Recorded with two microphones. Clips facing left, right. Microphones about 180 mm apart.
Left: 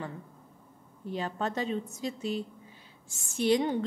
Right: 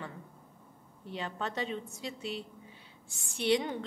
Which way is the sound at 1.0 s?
40° left (ahead or behind).